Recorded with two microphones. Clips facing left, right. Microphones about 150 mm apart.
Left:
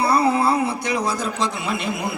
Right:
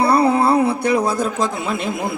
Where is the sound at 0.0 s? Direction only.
55° right (ahead or behind).